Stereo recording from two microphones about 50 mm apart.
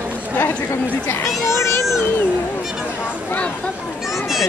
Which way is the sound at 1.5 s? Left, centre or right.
Left.